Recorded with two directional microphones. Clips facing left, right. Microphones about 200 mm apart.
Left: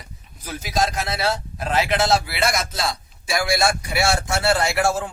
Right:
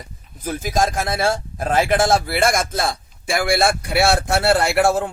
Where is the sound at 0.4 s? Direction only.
50° right (ahead or behind).